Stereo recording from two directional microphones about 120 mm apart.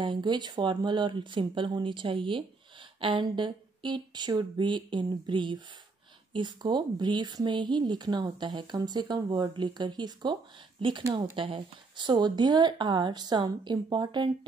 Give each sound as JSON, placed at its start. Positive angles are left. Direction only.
{"t": 0.0, "sound": "speech", "side_deg": -40}